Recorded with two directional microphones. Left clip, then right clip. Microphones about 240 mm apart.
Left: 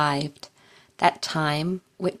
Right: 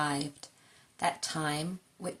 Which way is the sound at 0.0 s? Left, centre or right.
Left.